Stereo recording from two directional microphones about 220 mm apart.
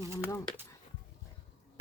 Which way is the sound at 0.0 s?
10° right (ahead or behind).